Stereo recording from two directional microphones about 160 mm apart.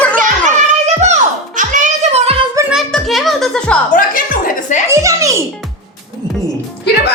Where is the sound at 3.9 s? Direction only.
55° left (ahead or behind).